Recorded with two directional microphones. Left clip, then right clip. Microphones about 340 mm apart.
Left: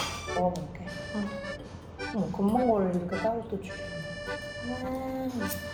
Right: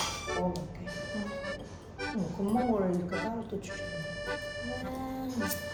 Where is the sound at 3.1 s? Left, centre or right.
Centre.